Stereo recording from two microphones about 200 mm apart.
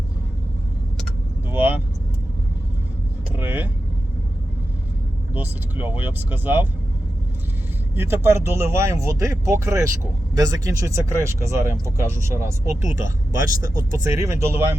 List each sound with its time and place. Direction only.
1.5 s vehicle: 10° right (ahead or behind)
3.3 s vehicle: 10° right (ahead or behind)
5.3 s speech: 10° right (ahead or behind)
7.9 s speech: 10° right (ahead or behind)
12.6 s speech: 40° left (ahead or behind)
13.6 s speech: 15° right (ahead or behind)